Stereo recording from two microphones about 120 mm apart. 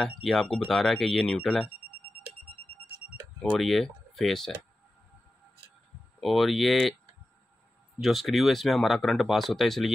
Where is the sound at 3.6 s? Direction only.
Centre (ahead or behind).